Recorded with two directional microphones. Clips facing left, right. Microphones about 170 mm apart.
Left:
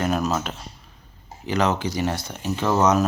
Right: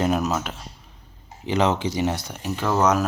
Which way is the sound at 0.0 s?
15° right (ahead or behind).